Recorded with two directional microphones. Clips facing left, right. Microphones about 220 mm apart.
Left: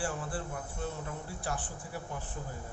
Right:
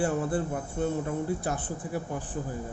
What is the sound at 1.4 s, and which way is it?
Speech, 20° right (ahead or behind).